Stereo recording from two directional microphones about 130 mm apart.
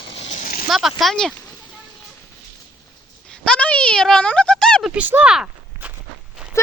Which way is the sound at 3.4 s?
10° left (ahead or behind).